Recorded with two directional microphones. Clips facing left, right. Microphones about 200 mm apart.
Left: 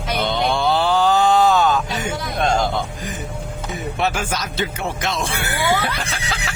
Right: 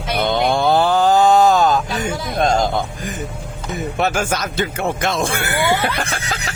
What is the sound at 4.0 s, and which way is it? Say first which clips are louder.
Speech: right 3 dB; 45° right (ahead or behind).